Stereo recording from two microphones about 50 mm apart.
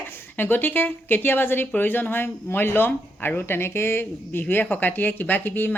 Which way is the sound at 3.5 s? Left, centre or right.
Left.